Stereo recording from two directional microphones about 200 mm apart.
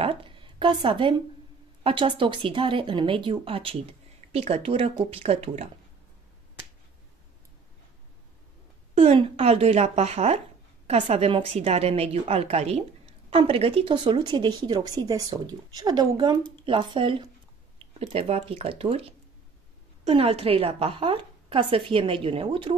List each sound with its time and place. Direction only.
0.0 s a sound: 25° right (ahead or behind)
1.8 s speech: 25° right (ahead or behind)
8.9 s a woman's voice: 30° right (ahead or behind)